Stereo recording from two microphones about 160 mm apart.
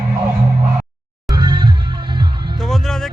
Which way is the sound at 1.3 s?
30° right (ahead or behind).